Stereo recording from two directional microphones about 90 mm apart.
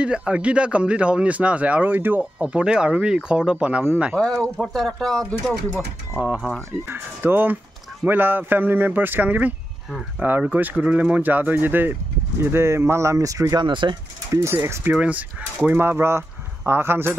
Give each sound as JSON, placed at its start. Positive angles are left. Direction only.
{"t": 0.0, "sound": "speech", "side_deg": -10}
{"t": 4.1, "sound": "speech", "side_deg": 5}
{"t": 6.9, "sound": "speech", "side_deg": -25}
{"t": 13.6, "sound": "speech", "side_deg": -60}
{"t": 14.3, "sound": "speech", "side_deg": -30}
{"t": 14.9, "sound": "speech", "side_deg": -15}